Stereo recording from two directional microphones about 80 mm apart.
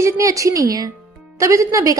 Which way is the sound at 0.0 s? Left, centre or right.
Right.